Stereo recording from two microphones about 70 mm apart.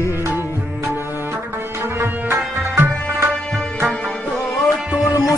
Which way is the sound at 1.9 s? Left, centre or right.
Right.